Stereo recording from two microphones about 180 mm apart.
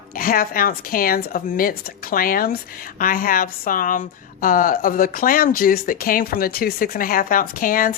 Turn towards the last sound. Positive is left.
turn(degrees=50)  # may be behind; listen again after turning